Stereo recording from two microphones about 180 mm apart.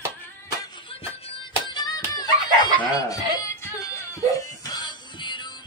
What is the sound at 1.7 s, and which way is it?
Music, 25° left (ahead or behind).